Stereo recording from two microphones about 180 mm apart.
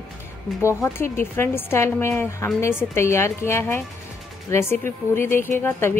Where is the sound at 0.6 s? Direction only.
15° left (ahead or behind).